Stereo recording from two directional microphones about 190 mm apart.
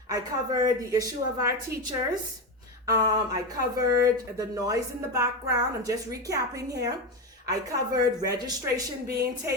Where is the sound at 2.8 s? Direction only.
20° right (ahead or behind).